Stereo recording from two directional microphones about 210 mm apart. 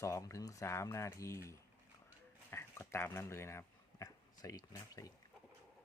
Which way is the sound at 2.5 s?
10° left (ahead or behind).